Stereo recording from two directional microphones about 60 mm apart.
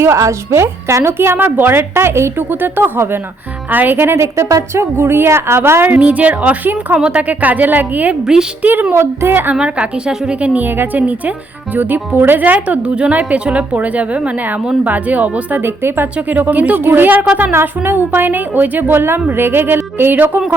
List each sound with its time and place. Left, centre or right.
0.0 s a woman's voice: right
2.5 s a woman's voice: right
4.2 s a woman's voice: right
5.9 s a woman's voice: right
9.6 s a woman's voice: centre
15.6 s a woman's voice: right
16.1 s a woman's voice: right